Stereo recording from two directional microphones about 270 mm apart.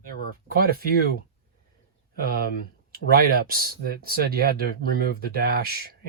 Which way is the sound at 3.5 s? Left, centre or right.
Right.